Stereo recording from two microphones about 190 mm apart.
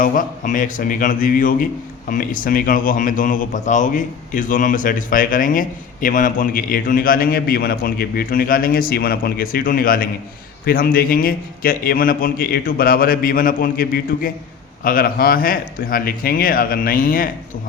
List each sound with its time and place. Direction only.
0.0 s a man's voice: 45° left (ahead or behind)